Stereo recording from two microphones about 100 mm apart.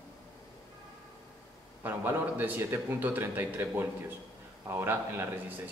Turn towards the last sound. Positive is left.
turn(degrees=-20)  # may be behind; listen again after turning